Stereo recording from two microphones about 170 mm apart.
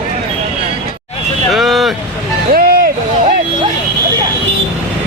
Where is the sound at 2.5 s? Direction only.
60° right (ahead or behind).